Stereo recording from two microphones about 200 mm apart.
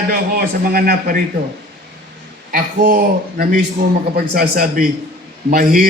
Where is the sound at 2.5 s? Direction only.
45° right (ahead or behind).